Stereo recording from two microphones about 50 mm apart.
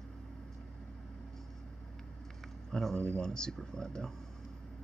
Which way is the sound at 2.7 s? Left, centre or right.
Centre.